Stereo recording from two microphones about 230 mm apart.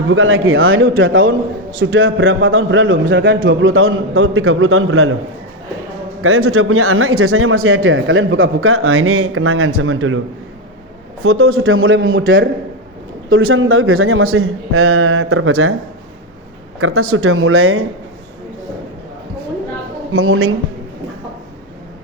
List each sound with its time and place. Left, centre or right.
0.1 s a man's voice: right
6.2 s a man's voice: right
11.2 s a man's voice: right
16.8 s speech: right
20.1 s speech: right